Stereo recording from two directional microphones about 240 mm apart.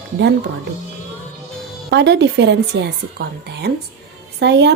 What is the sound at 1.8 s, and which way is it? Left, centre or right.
A woman's voice, right.